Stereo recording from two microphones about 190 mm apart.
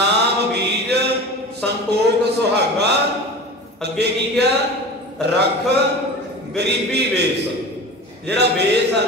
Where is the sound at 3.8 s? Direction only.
60° right (ahead or behind).